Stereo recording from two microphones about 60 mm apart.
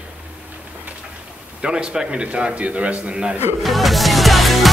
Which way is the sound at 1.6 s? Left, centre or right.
Centre.